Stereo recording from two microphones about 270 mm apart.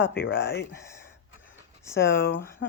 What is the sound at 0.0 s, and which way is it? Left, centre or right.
Speech, centre.